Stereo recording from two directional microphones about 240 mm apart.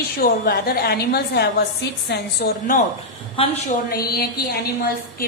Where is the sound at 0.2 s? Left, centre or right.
Left.